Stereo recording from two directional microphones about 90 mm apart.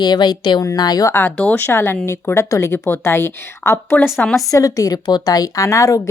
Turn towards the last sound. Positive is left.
turn(degrees=35)  # may be behind; listen again after turning